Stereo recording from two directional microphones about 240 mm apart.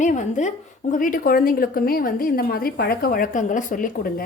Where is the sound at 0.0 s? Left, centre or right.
Left.